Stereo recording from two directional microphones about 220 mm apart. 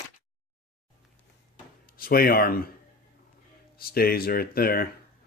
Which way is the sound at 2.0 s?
40° left (ahead or behind).